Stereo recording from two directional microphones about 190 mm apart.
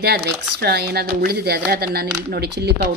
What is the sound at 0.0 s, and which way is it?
A woman's voice, 60° right (ahead or behind).